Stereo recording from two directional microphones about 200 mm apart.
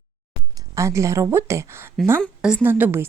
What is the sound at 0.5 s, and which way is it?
Speech, 15° right (ahead or behind).